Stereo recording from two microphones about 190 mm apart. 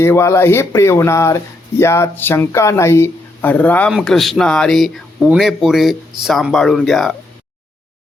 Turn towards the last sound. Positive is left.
turn(degrees=0)  # may be behind; listen again after turning